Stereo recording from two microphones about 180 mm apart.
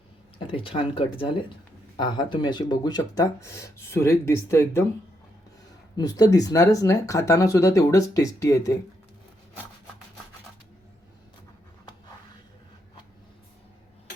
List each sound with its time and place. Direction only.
0.3 s speech: 30° left (ahead or behind)
6.0 s speech: 20° left (ahead or behind)